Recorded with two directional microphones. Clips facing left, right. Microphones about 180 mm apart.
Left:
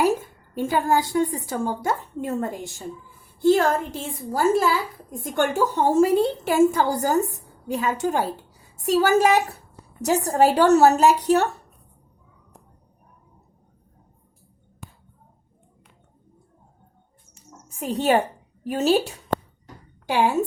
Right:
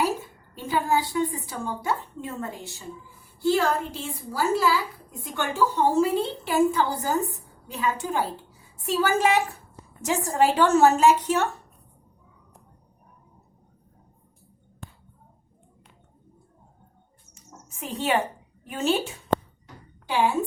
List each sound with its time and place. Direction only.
0.0 s a woman's voice: 45° left (ahead or behind)
17.7 s a woman's voice: 40° left (ahead or behind)
19.6 s a sound: 40° left (ahead or behind)